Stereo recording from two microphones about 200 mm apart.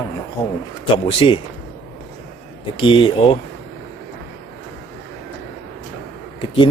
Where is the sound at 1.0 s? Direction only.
30° left (ahead or behind).